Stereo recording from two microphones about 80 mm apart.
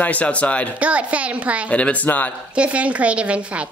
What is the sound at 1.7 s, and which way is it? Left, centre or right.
Speech, centre.